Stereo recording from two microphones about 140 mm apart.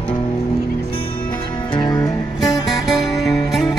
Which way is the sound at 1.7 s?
25° left (ahead or behind).